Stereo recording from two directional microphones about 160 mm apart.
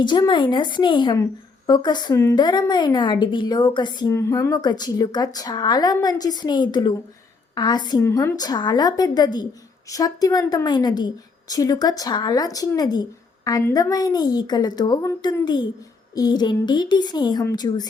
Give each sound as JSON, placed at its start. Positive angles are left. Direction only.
{"t": 0.0, "sound": "a woman's voice", "side_deg": 30}
{"t": 4.1, "sound": "a woman's voice", "side_deg": 20}